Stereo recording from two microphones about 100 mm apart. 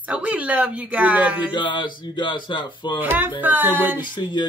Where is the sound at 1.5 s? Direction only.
55° left (ahead or behind).